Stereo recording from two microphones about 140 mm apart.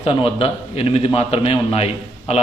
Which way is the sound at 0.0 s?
45° left (ahead or behind).